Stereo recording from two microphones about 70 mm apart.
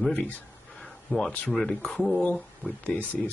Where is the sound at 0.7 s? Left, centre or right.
Centre.